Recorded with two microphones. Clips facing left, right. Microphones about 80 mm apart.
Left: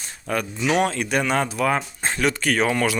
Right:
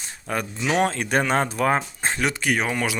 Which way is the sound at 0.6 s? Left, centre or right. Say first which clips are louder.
Left 1 dB; right.